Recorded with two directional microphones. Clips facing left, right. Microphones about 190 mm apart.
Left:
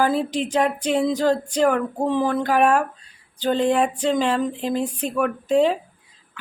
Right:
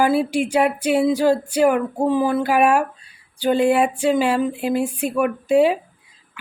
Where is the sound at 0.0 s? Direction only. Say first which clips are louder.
Right 3 dB; 10° right (ahead or behind).